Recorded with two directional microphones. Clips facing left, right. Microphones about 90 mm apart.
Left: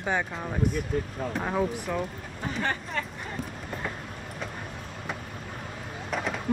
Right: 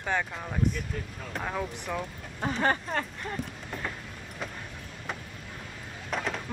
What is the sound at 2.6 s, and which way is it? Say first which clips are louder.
Speech: right 3 dB; 40° right (ahead or behind).